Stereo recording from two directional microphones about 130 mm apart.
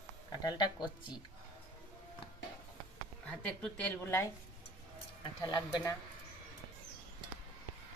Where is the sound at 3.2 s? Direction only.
10° left (ahead or behind).